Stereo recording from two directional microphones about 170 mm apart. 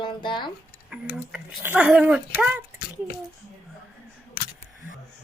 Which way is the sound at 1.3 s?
10° right (ahead or behind).